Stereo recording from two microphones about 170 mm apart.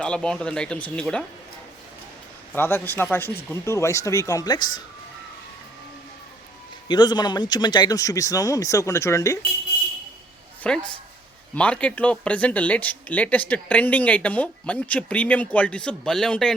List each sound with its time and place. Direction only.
0.0 s speech: 5° left (ahead or behind)
2.6 s speech: 15° left (ahead or behind)
6.8 s speech: 25° left (ahead or behind)
10.6 s speech: 5° left (ahead or behind)